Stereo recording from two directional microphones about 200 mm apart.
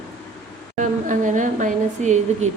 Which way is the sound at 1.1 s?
40° right (ahead or behind).